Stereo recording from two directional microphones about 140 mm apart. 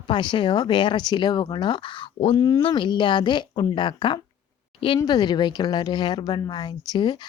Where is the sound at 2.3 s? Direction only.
25° left (ahead or behind).